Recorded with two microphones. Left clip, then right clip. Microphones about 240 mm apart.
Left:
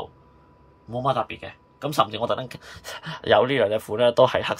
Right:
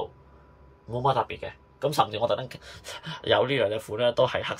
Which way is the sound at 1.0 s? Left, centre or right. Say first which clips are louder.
Even; centre.